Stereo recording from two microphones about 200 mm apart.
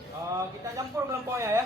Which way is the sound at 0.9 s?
15° right (ahead or behind).